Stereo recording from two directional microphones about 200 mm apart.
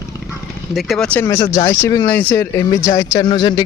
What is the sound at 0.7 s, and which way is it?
Speech, centre (ahead or behind).